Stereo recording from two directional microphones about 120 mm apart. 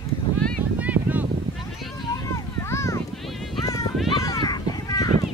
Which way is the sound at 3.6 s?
30° left (ahead or behind).